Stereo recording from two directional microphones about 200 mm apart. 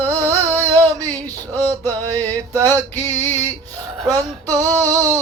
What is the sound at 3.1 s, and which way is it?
Music, 10° left (ahead or behind).